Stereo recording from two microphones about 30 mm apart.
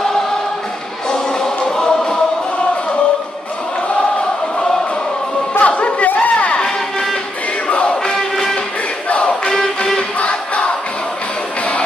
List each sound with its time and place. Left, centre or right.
1.1 s music: left
5.6 s chatter: left
6.0 s a sound: left
7.6 s music: left
8.1 s music: centre
9.1 s battle cry: left
10.1 s music: left